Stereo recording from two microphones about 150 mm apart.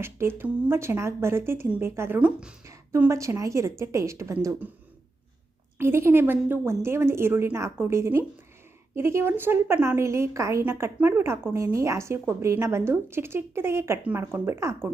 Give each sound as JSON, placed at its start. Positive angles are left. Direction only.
{"t": 0.0, "sound": "a woman's voice", "side_deg": -15}
{"t": 2.6, "sound": "a woman's voice", "side_deg": -20}
{"t": 5.7, "sound": "a woman's voice", "side_deg": -15}